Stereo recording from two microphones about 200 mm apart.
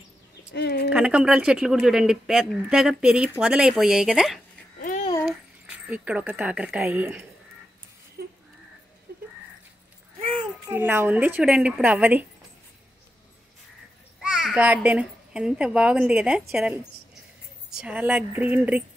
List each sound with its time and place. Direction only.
0.6 s speech: 55° left (ahead or behind)
0.9 s speech: 5° right (ahead or behind)
5.9 s a woman's voice: 5° right (ahead or behind)
10.7 s a woman's voice: 10° right (ahead or behind)
14.2 s a child's voice: 5° right (ahead or behind)
17.6 s a woman's voice: 5° right (ahead or behind)